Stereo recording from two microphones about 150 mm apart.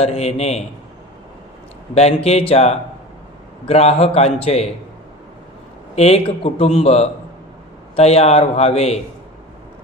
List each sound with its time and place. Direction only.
0.0 s a man's voice: 45° left (ahead or behind)
2.2 s a man's voice: 45° left (ahead or behind)
5.9 s a man's voice: 45° left (ahead or behind)